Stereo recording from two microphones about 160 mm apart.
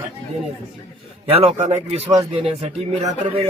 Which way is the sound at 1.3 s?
40° right (ahead or behind).